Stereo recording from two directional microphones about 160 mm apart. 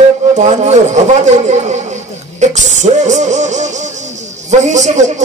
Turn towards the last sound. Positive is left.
turn(degrees=-50)  # may be behind; listen again after turning